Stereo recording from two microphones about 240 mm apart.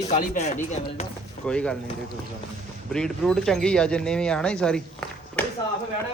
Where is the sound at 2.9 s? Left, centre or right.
Centre.